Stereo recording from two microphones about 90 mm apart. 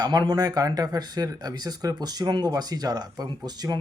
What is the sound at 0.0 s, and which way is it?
Speech, 50° right (ahead or behind).